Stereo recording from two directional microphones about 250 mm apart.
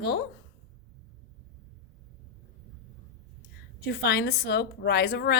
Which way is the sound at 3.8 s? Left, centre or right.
Left.